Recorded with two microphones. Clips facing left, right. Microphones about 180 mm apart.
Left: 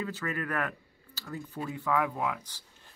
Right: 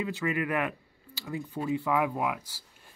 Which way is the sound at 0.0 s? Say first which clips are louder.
Right 4 dB; 15° right (ahead or behind).